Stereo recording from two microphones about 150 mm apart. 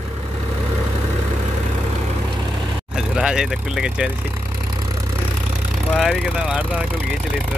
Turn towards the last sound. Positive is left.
turn(degrees=-5)  # may be behind; listen again after turning